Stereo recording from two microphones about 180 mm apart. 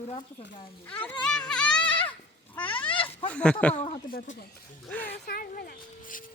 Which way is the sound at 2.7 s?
30° left (ahead or behind).